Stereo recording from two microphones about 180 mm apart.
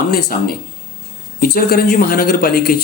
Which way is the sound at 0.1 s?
55° left (ahead or behind).